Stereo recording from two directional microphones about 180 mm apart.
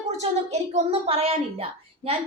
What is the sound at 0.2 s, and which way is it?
A woman's voice, 35° right (ahead or behind).